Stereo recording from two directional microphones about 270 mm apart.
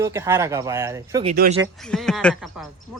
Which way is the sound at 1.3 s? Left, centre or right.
Right.